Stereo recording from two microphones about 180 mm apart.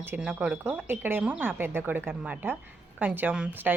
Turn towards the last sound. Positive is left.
turn(degrees=-10)  # may be behind; listen again after turning